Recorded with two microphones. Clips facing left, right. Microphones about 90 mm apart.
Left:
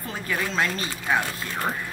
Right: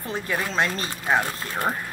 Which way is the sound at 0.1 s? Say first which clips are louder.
Right 1 dB; 25° right (ahead or behind).